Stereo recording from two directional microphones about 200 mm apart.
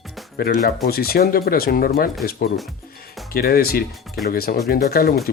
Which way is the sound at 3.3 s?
50° left (ahead or behind).